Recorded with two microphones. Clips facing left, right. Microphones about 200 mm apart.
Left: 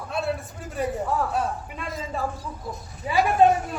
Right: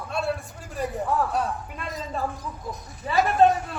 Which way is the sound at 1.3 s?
Centre (ahead or behind).